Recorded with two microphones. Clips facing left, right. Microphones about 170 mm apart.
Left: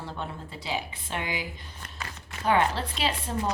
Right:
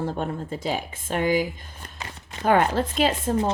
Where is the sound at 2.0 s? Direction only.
25° right (ahead or behind).